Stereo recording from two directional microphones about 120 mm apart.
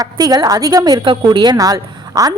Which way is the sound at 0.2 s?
35° right (ahead or behind).